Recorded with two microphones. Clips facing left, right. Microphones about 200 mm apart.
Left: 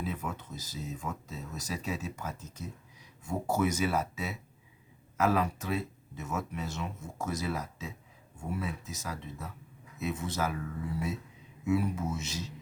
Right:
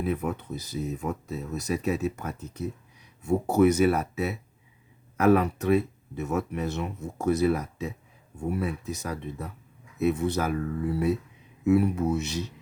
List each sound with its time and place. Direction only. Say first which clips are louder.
0.0 s speech: right 8 dB; 60° right (ahead or behind)